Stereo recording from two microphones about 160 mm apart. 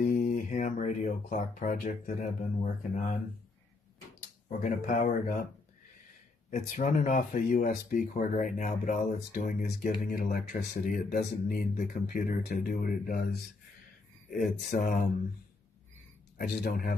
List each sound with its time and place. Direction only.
0.0 s speech: 60° left (ahead or behind)
4.5 s speech: 55° left (ahead or behind)
6.5 s speech: 55° left (ahead or behind)
14.3 s speech: 60° left (ahead or behind)
16.3 s speech: 75° left (ahead or behind)